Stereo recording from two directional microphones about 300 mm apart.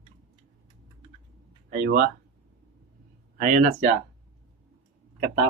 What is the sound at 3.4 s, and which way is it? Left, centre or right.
Speech, right.